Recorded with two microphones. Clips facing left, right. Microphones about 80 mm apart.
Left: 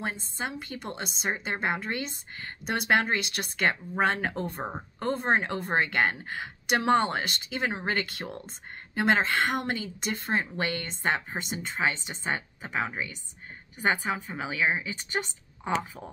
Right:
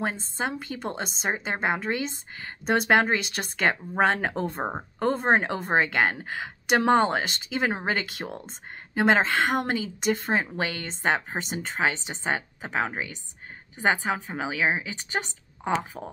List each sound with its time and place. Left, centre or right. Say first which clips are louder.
0.0 s speech: right 4 dB; right